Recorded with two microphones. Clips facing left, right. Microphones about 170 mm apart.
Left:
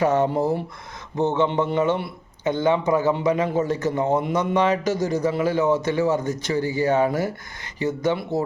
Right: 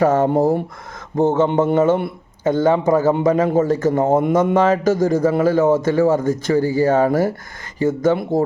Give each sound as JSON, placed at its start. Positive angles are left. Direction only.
{"t": 0.0, "sound": "a man's voice", "side_deg": -45}